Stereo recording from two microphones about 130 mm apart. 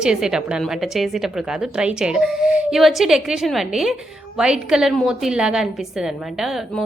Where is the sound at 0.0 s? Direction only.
5° right (ahead or behind).